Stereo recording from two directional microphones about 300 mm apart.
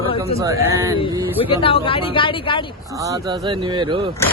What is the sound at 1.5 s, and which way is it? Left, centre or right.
Speech, centre.